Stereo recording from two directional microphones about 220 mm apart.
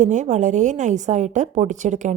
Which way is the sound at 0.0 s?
35° right (ahead or behind).